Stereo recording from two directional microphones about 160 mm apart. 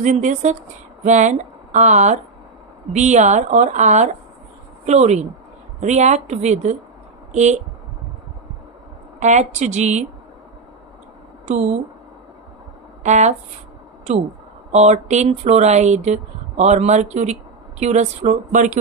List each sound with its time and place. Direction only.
0.0 s speech: 50° right (ahead or behind)
9.2 s speech: 45° right (ahead or behind)
11.5 s speech: 45° right (ahead or behind)
13.0 s speech: 45° right (ahead or behind)
14.7 s speech: 45° right (ahead or behind)